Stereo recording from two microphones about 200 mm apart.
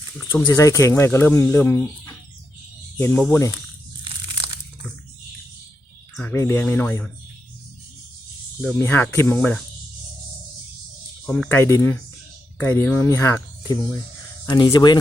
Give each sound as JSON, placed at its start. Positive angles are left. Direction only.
{"t": 0.2, "sound": "speech", "side_deg": 15}
{"t": 6.1, "sound": "speech", "side_deg": 10}
{"t": 8.6, "sound": "speech", "side_deg": 10}
{"t": 11.3, "sound": "speech", "side_deg": 10}